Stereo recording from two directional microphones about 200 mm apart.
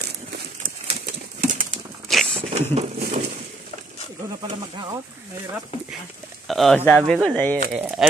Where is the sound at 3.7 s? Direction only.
30° left (ahead or behind).